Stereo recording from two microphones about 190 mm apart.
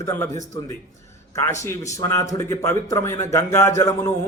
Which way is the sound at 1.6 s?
15° left (ahead or behind).